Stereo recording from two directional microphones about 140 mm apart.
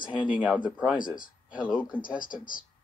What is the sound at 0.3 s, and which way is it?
Speech, 10° right (ahead or behind).